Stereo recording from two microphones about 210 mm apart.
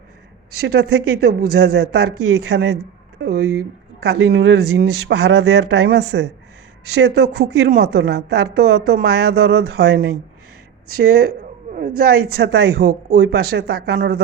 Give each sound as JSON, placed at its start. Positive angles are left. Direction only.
{"t": 0.6, "sound": "a woman's voice", "side_deg": -50}